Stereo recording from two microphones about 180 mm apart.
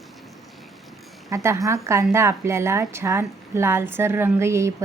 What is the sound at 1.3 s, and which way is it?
A woman's voice, 15° right (ahead or behind).